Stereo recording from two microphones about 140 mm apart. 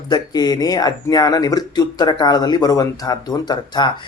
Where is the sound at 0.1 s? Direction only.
30° left (ahead or behind).